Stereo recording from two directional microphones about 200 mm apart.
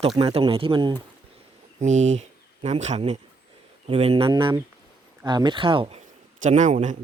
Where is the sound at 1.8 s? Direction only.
35° right (ahead or behind).